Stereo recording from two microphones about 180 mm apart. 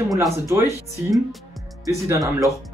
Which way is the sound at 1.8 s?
20° right (ahead or behind).